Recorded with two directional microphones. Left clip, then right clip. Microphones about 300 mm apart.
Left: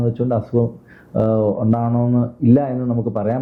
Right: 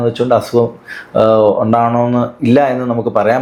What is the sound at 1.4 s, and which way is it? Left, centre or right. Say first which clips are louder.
Speech: right 9 dB; right.